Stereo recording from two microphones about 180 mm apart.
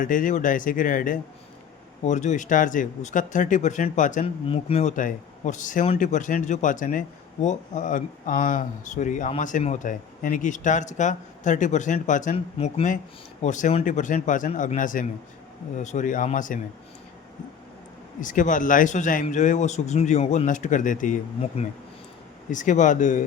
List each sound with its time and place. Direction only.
0.0 s speech: 50° left (ahead or behind)
4.4 s speech: 30° left (ahead or behind)
18.2 s speech: 45° left (ahead or behind)